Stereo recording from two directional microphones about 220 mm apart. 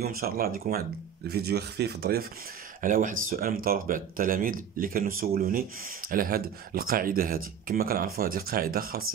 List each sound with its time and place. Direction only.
0.0 s speech: 40° right (ahead or behind)